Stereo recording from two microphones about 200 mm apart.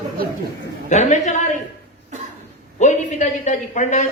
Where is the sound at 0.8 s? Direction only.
35° left (ahead or behind).